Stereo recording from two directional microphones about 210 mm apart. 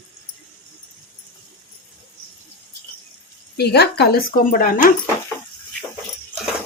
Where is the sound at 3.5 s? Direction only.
50° left (ahead or behind).